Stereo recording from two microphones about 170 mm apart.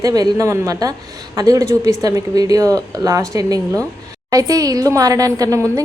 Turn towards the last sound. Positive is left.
turn(degrees=-20)  # may be behind; listen again after turning